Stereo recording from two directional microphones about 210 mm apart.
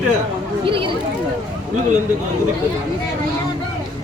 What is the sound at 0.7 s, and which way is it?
Speech, 25° right (ahead or behind).